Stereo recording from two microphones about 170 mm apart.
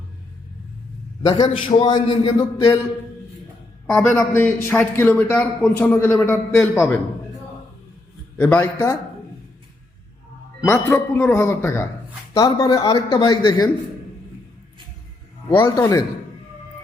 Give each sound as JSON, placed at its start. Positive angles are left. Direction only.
{"t": 1.2, "sound": "a man's voice", "side_deg": 25}
{"t": 4.1, "sound": "a man's voice", "side_deg": 15}
{"t": 8.4, "sound": "a man's voice", "side_deg": 10}
{"t": 10.7, "sound": "a man's voice", "side_deg": 15}
{"t": 15.5, "sound": "a man's voice", "side_deg": 15}